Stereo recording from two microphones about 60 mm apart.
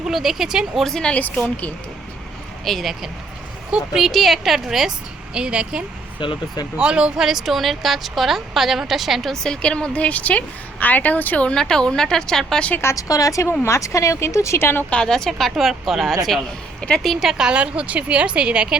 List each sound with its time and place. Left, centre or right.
0.0 s a woman's voice: centre
0.9 s a woman's voice: centre
2.6 s speech: centre
3.9 s speech: centre
5.3 s a woman's voice: centre; by 11.5 s left
11.5 s a woman's voice: centre
13.0 s speech: left
13.5 s speech: left
14.8 s a woman's voice: centre